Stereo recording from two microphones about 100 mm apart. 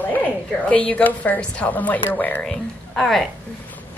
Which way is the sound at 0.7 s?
15° left (ahead or behind).